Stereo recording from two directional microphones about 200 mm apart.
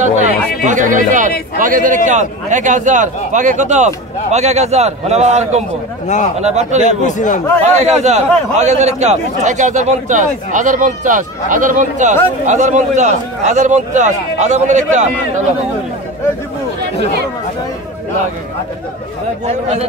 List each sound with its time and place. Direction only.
0.7 s a sound: 40° right (ahead or behind)
1.6 s a man's voice: 40° right (ahead or behind)
6.0 s speech: 35° left (ahead or behind)
6.4 s a man's voice: 35° right (ahead or behind)
6.8 s speech: 40° left (ahead or behind)
7.6 s a man's voice: 35° right (ahead or behind)